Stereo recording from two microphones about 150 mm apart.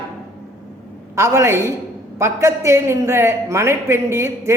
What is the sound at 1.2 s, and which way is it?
A man's voice, 20° right (ahead or behind).